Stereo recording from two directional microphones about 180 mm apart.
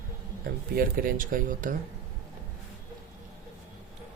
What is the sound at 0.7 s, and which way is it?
Speech, 50° right (ahead or behind).